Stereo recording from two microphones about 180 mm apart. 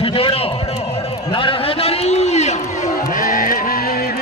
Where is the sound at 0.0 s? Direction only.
30° left (ahead or behind).